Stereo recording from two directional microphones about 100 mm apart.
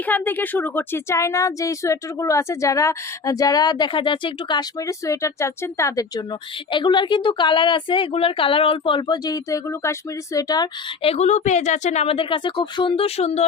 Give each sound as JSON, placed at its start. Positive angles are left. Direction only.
{"t": 0.0, "sound": "speech", "side_deg": 20}
{"t": 4.9, "sound": "speech", "side_deg": 30}
{"t": 6.7, "sound": "a woman's voice", "side_deg": 50}
{"t": 10.3, "sound": "speech", "side_deg": 40}
{"t": 11.0, "sound": "a woman's voice", "side_deg": 90}
{"t": 11.9, "sound": "speech", "side_deg": 70}
{"t": 13.1, "sound": "speech", "side_deg": 90}